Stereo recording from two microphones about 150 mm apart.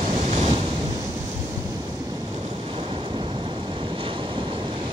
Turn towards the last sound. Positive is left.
turn(degrees=-35)  # may be behind; listen again after turning